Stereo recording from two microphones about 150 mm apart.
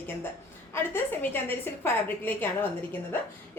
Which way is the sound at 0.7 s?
15° left (ahead or behind).